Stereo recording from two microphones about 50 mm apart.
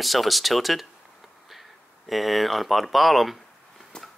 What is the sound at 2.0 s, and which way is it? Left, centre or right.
Speech, centre.